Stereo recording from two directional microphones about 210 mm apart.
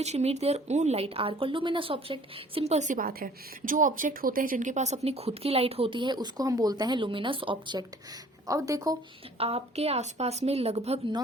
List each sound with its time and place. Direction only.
0.0 s a woman's voice: 30° right (ahead or behind); by 9.0 s 15° right (ahead or behind)
9.4 s speech: 25° right (ahead or behind)